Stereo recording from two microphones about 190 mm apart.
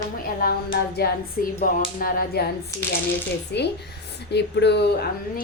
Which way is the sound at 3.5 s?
65° left (ahead or behind).